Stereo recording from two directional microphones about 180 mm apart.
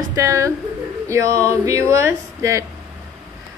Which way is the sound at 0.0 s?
20° right (ahead or behind).